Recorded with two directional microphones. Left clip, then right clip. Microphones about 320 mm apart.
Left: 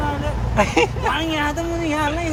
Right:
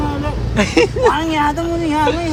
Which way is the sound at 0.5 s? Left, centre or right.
Centre.